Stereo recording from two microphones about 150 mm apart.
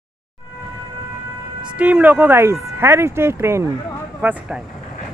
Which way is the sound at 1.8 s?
10° right (ahead or behind).